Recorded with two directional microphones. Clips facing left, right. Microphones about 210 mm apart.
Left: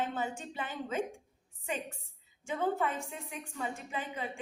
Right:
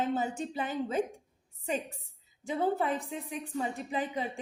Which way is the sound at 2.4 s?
35° right (ahead or behind).